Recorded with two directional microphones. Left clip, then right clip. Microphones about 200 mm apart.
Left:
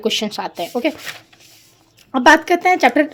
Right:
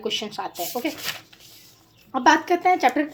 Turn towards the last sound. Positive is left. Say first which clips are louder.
# left 6 dB
turn(degrees=50)  # may be behind; listen again after turning